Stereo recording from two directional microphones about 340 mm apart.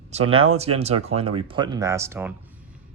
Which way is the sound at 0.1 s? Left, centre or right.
Centre.